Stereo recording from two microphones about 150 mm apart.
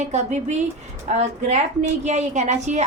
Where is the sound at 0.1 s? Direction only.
50° right (ahead or behind).